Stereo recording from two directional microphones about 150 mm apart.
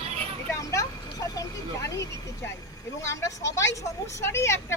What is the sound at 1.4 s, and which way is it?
Vehicle, 20° left (ahead or behind).